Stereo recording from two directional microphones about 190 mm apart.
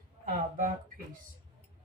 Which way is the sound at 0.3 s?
45° right (ahead or behind).